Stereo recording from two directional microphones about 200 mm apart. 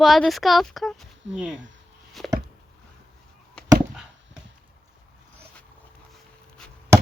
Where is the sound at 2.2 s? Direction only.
Centre (ahead or behind).